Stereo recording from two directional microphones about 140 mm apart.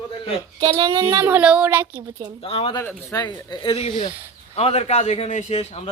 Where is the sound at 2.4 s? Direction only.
40° left (ahead or behind).